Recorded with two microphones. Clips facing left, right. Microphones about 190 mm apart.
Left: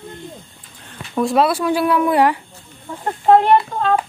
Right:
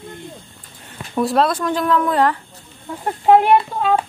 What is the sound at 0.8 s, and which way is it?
Speech, 5° right (ahead or behind).